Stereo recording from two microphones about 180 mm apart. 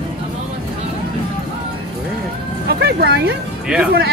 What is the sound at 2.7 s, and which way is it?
Speech, 65° right (ahead or behind).